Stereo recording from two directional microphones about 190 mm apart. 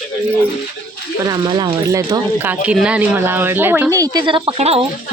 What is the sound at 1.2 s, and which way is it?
A woman's voice, 20° right (ahead or behind).